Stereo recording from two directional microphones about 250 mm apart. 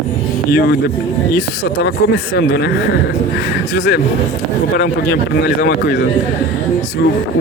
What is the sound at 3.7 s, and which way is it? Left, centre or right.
Speech, left.